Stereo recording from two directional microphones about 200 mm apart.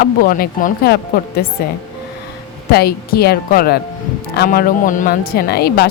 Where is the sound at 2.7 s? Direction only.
50° left (ahead or behind).